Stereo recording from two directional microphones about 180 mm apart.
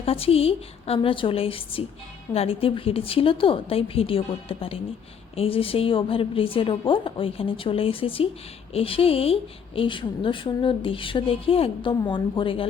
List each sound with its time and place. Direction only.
0.0 s a woman's voice: 35° left (ahead or behind)